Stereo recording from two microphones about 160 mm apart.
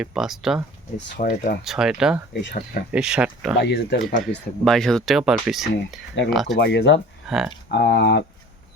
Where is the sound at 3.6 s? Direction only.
90° left.